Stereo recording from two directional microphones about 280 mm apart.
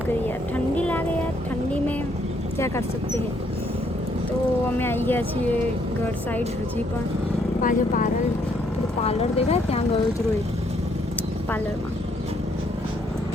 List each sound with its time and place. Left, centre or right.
0.5 s a sound: centre
4.8 s speech: centre
7.6 s speech: left